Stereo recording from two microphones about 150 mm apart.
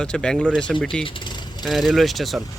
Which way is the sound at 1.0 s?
30° left (ahead or behind).